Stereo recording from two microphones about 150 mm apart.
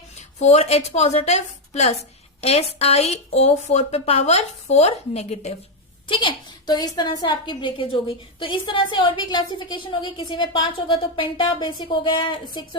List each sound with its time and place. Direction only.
0.3 s a woman's voice: 45° left (ahead or behind)
6.1 s a woman's voice: 35° left (ahead or behind)